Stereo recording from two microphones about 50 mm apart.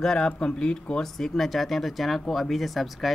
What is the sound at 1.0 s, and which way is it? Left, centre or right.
Speech, centre.